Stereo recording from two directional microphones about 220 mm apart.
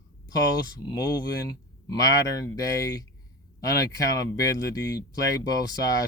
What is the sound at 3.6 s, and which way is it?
Speech, 15° left (ahead or behind).